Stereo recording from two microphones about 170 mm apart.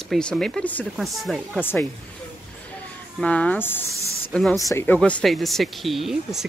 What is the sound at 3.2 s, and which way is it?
Speech, 10° left (ahead or behind).